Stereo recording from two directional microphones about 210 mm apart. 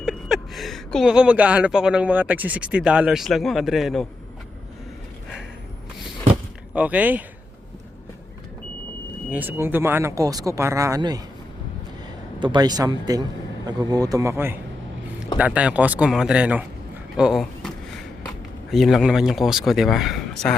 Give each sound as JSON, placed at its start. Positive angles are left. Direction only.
{"t": 0.0, "sound": "speech", "side_deg": 0}
{"t": 6.7, "sound": "speech", "side_deg": -5}
{"t": 9.3, "sound": "speech", "side_deg": -10}
{"t": 12.4, "sound": "speech", "side_deg": -20}
{"t": 17.2, "sound": "a sound", "side_deg": -5}
{"t": 18.7, "sound": "speech", "side_deg": 0}